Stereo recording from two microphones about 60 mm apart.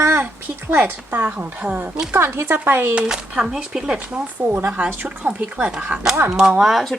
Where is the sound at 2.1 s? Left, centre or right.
Right.